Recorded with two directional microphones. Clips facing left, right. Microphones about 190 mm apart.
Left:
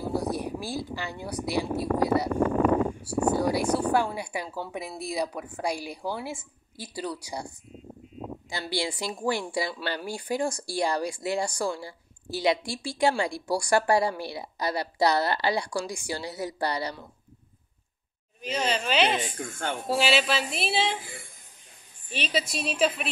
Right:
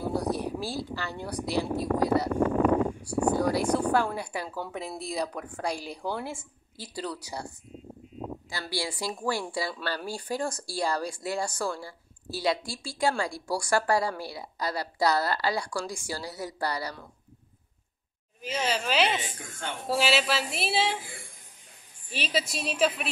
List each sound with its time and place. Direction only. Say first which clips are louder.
0.1 s speech: even; 10° left (ahead or behind)
8.5 s a woman's voice: left 4 dB; 20° left (ahead or behind)
18.4 s speech: left 1 dB; 5° right (ahead or behind)
22.1 s speech: left 1 dB; centre (ahead or behind)